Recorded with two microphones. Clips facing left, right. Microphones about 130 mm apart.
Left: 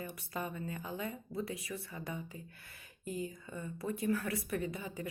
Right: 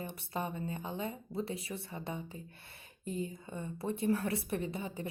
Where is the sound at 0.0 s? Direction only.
25° right (ahead or behind).